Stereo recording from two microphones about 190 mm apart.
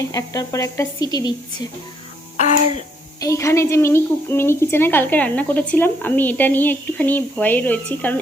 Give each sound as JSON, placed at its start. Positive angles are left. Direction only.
{"t": 0.0, "sound": "a woman's voice", "side_deg": 15}
{"t": 3.2, "sound": "a woman's voice", "side_deg": 15}